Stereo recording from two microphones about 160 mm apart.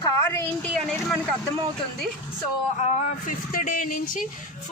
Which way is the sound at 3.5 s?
60° left (ahead or behind).